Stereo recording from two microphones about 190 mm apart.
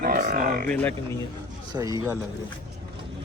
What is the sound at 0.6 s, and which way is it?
Speech, 10° left (ahead or behind).